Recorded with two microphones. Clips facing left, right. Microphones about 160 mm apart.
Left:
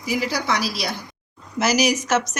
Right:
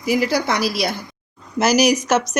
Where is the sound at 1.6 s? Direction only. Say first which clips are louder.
Right 4 dB; 40° right (ahead or behind).